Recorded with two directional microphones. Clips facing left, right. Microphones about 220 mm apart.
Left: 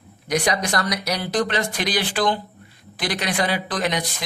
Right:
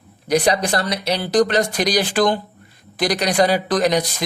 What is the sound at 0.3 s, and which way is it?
Speech, 35° right (ahead or behind).